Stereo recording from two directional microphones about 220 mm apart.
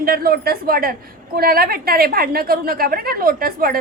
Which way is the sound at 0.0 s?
40° right (ahead or behind).